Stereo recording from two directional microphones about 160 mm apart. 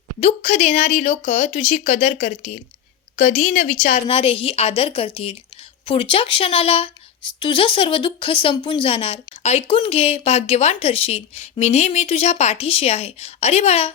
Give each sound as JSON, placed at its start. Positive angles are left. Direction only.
{"t": 0.2, "sound": "speech", "side_deg": 45}
{"t": 4.0, "sound": "speech", "side_deg": 35}